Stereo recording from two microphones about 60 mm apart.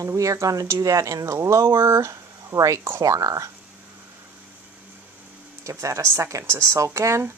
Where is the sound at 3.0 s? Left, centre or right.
Right.